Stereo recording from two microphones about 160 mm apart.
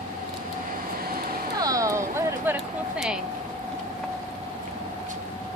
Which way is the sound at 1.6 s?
20° right (ahead or behind).